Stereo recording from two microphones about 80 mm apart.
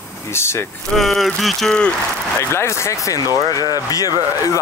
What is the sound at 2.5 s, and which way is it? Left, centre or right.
Speech, left.